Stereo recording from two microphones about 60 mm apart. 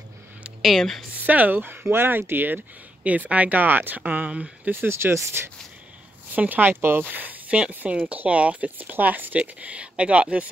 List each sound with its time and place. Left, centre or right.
0.6 s speech: centre
1.1 s speech: right
3.0 s speech: right
4.6 s speech: right
6.3 s speech: right